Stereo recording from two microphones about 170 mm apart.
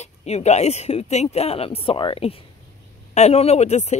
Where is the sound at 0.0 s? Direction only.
40° left (ahead or behind).